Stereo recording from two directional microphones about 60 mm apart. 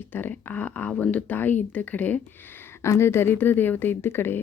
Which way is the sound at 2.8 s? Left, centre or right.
Left.